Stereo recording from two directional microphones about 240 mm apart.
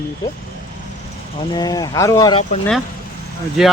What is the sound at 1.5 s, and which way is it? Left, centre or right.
Speech, centre.